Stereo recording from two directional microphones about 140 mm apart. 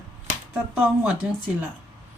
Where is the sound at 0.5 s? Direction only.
10° right (ahead or behind).